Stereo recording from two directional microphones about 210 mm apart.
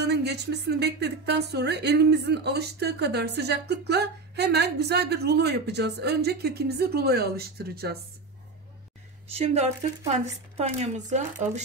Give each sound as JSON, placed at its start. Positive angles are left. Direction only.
{"t": 0.0, "sound": "speech", "side_deg": -50}
{"t": 9.4, "sound": "speech", "side_deg": -30}